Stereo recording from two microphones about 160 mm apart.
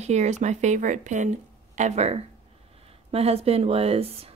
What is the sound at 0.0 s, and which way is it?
Speech, 45° right (ahead or behind).